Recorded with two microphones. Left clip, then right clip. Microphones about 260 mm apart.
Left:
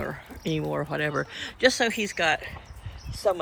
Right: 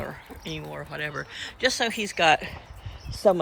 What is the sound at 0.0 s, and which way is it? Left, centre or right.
Speech, centre.